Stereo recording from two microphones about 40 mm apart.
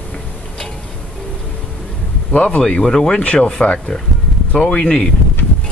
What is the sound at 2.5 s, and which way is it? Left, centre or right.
Speech, left.